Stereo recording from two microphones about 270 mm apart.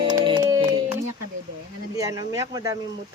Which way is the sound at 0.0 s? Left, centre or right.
Centre.